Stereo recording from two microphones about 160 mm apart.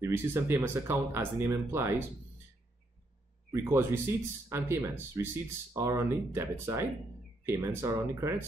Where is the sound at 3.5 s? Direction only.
15° right (ahead or behind).